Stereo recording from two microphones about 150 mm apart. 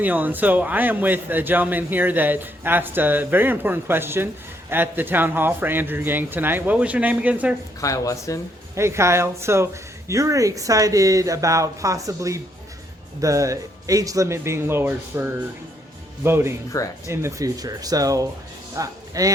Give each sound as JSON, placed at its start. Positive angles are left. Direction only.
{"t": 0.0, "sound": "a man's voice", "side_deg": -10}
{"t": 7.8, "sound": "speech", "side_deg": 20}
{"t": 8.7, "sound": "a man's voice", "side_deg": -20}